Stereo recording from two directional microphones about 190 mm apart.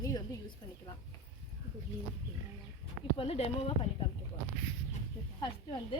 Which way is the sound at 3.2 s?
30° left (ahead or behind).